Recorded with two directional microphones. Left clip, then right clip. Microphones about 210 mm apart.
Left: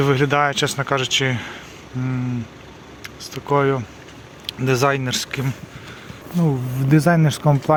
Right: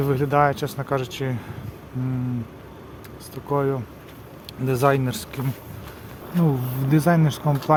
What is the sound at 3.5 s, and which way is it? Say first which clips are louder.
Speech: left 5 dB; 15° left (ahead or behind).